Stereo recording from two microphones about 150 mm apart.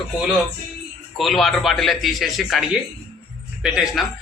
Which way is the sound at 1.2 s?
Centre (ahead or behind).